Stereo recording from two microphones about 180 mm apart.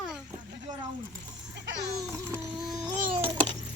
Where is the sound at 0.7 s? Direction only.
25° right (ahead or behind).